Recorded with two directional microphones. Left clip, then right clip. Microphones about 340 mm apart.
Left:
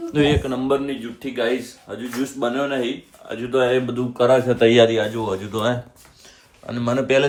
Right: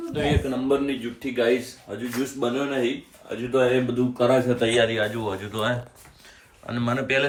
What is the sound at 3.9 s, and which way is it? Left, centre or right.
Speech, centre.